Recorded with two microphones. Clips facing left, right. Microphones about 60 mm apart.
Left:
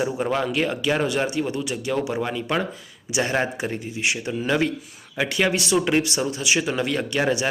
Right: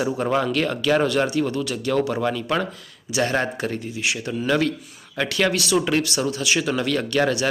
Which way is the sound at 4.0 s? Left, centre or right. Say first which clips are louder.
Left 2 dB; left.